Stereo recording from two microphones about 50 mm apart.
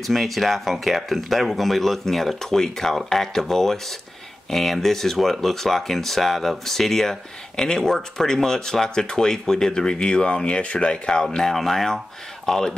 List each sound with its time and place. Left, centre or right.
0.0 s speech: centre
11.3 s speech: centre